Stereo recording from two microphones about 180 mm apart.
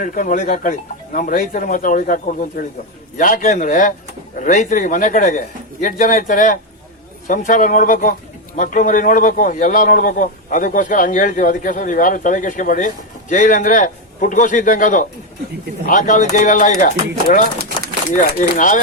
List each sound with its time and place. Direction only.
0.0 s a man's voice: 50° left (ahead or behind)